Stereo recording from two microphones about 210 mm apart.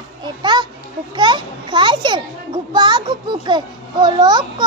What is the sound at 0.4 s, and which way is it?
Children playing, 20° right (ahead or behind).